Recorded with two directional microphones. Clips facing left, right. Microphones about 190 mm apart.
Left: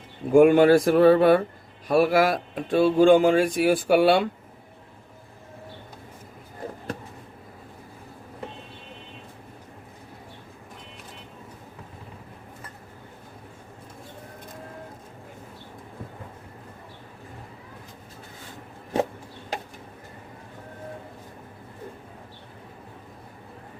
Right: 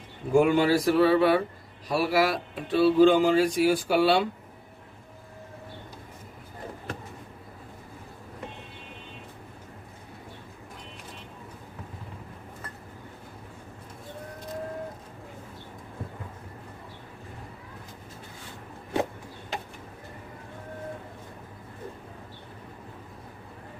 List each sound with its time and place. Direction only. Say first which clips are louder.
0.3 s speech: left 6 dB; 55° left (ahead or behind)